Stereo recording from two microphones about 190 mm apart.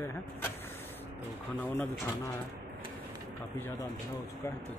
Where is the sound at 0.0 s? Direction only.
10° left (ahead or behind).